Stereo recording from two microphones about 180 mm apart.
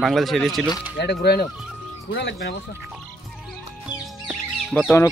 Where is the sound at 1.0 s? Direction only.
65° left (ahead or behind).